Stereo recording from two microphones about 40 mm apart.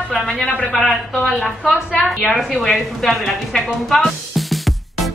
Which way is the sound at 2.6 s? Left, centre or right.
Centre.